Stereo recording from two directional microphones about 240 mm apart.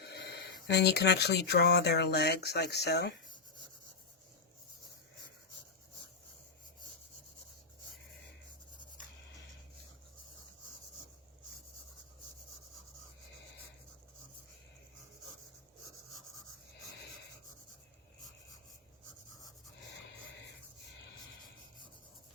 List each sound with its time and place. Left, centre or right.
0.0 s speech: left